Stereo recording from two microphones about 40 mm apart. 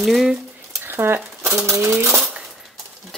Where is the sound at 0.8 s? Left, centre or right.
Right.